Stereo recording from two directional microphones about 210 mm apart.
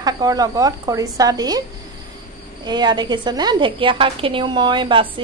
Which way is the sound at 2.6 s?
20° right (ahead or behind).